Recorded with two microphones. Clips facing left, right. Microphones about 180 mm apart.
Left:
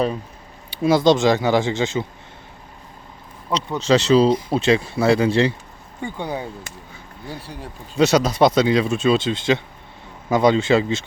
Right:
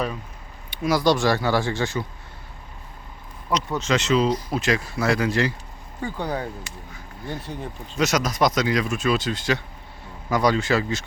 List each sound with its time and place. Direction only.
0.7 s speech: 30° left (ahead or behind)
3.8 s speech: 35° left (ahead or behind)
7.5 s speech: 10° left (ahead or behind)
7.9 s speech: 30° left (ahead or behind)